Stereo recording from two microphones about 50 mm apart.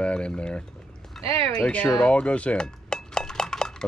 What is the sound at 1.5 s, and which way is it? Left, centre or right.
Speech, left.